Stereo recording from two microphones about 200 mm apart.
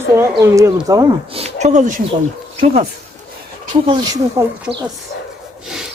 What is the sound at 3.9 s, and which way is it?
Speech, 20° right (ahead or behind).